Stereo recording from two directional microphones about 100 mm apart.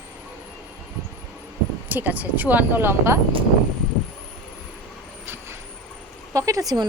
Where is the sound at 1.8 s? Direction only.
20° right (ahead or behind).